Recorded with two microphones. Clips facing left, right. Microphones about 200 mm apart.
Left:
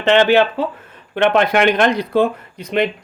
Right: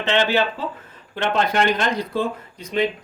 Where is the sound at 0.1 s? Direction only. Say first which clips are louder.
Left 8 dB; 65° left (ahead or behind).